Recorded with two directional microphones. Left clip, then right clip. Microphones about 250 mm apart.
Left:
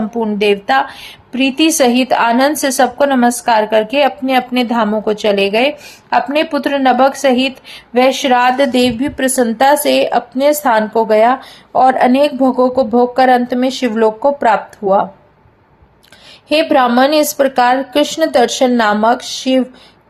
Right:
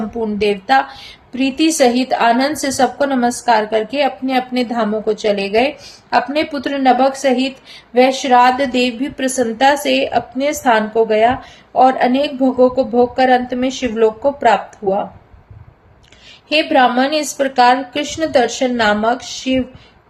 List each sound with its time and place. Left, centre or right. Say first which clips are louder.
0.1 s a woman's voice: left 4 dB; centre
16.5 s a woman's voice: left 1 dB; left